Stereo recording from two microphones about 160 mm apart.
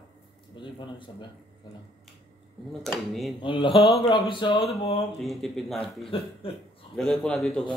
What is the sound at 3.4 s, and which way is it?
A man's voice, 30° left (ahead or behind).